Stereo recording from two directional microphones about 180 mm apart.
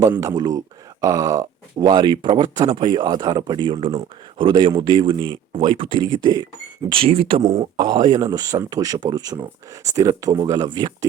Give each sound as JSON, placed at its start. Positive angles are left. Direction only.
{"t": 0.0, "sound": "speech", "side_deg": -20}